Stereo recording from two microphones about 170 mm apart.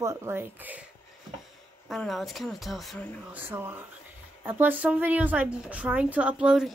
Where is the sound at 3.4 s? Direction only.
10° right (ahead or behind).